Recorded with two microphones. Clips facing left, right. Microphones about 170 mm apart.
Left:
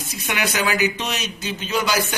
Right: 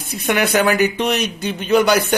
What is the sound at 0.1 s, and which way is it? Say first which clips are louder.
Speech: right 8 dB; 55° right (ahead or behind).